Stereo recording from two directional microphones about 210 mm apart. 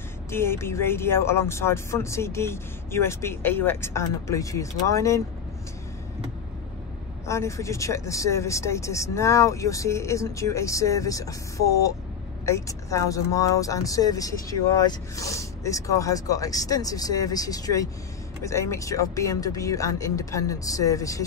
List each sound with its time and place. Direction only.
0.3 s speech: 10° left (ahead or behind)
7.2 s speech: 15° left (ahead or behind)